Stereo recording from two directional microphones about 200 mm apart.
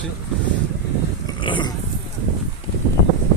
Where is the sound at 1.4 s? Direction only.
25° left (ahead or behind).